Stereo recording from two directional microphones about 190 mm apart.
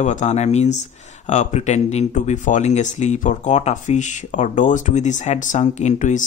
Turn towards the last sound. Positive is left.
turn(degrees=40)  # may be behind; listen again after turning